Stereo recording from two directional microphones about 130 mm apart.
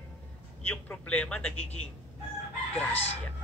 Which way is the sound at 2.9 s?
55° left (ahead or behind).